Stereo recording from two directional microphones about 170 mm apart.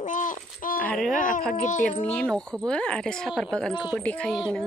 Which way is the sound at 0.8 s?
5° left (ahead or behind).